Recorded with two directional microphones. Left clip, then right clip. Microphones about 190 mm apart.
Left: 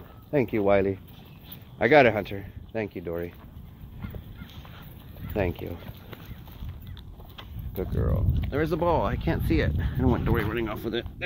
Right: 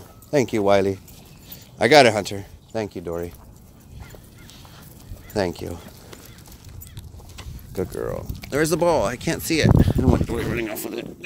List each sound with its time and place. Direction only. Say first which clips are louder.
0.3 s speech: right 4 dB; 30° right (ahead or behind)
5.3 s speech: right 5 dB; 30° right (ahead or behind)
7.7 s speech: right 5 dB; 50° right (ahead or behind)
8.8 s speech: right 5 dB; 30° right (ahead or behind)
9.1 s speech: right 4 dB; 15° right (ahead or behind)
10.3 s speech: right 2 dB; 30° right (ahead or behind)